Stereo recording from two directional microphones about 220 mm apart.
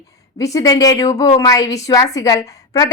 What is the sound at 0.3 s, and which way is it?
A woman's voice, 15° left (ahead or behind).